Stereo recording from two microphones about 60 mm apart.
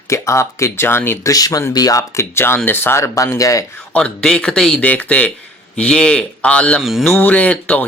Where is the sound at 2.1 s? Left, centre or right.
Left.